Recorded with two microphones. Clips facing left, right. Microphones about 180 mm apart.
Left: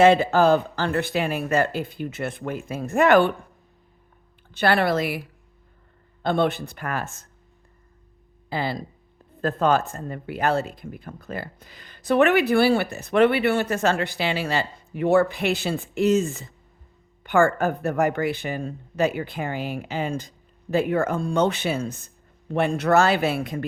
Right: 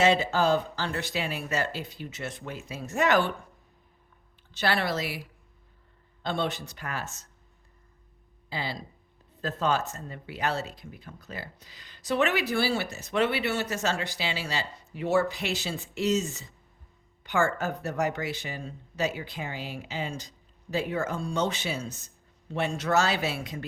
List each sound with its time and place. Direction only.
0.0 s speech: 55° left (ahead or behind)
4.5 s speech: 55° left (ahead or behind)
8.4 s speech: 50° left (ahead or behind)